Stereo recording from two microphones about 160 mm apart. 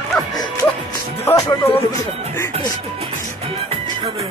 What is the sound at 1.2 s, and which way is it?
Speech, 20° left (ahead or behind).